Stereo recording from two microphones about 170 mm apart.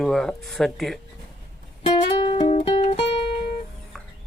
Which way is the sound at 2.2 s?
30° left (ahead or behind).